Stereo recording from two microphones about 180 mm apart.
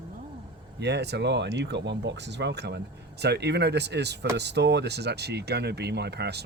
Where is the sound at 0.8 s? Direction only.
70° right (ahead or behind).